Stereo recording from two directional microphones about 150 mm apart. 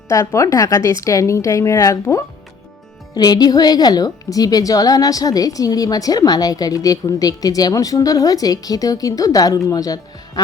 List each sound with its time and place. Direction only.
0.3 s a woman's voice: 20° left (ahead or behind)